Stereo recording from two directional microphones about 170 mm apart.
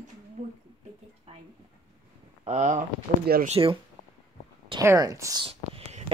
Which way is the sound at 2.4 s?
40° right (ahead or behind).